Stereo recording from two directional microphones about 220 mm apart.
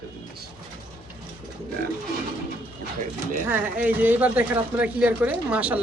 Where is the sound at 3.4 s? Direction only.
5° right (ahead or behind).